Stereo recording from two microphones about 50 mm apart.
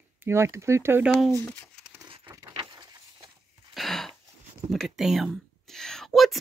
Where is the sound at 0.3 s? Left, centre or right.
Right.